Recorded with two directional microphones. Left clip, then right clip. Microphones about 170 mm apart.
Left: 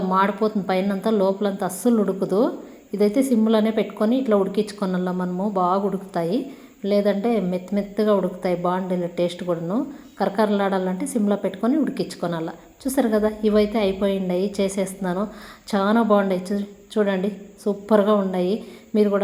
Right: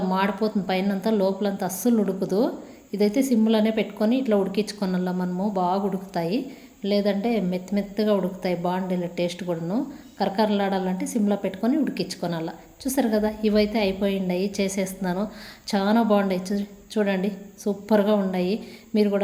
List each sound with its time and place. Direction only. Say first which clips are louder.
0.1 s a woman's voice: left 6 dB; 15° right (ahead or behind)